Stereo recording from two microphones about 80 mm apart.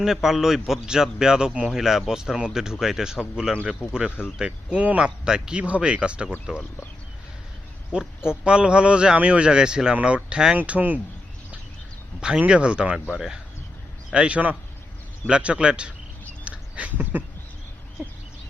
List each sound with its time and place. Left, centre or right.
0.0 s speech: centre
7.9 s speech: centre
12.2 s speech: centre
16.4 s a sound: centre